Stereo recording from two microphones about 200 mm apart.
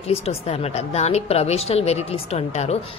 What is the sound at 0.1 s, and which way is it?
A woman's voice, 30° left (ahead or behind).